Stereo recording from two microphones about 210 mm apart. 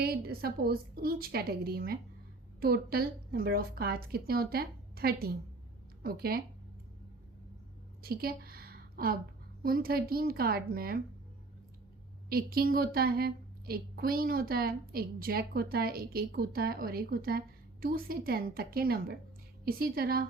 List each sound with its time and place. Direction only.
0.0 s a woman's voice: 45° right (ahead or behind)
8.0 s a sound: 45° right (ahead or behind)
9.6 s a woman's voice: 45° right (ahead or behind)
12.3 s a woman's voice: 45° right (ahead or behind)